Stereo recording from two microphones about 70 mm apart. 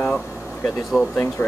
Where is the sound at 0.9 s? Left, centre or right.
Left.